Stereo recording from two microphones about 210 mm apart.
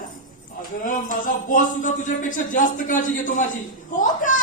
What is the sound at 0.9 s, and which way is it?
Speech, 40° left (ahead or behind).